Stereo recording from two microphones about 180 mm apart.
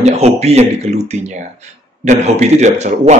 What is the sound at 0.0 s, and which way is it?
Speech, 35° right (ahead or behind).